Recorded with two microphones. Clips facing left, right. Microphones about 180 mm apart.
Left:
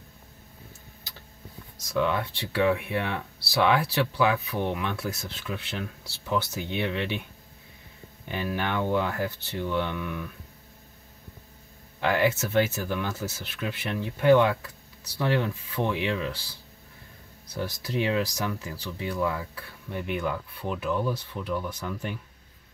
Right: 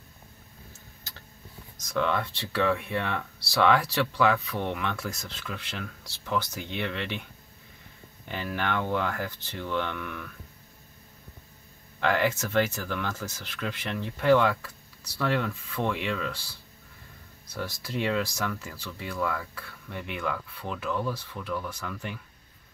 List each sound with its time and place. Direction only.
2.0 s speech: 15° left (ahead or behind)
8.3 s speech: 20° left (ahead or behind)
12.0 s speech: 15° left (ahead or behind)
17.6 s speech: 20° left (ahead or behind)